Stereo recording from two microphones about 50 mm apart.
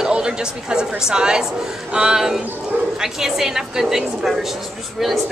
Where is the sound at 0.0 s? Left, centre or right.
Centre.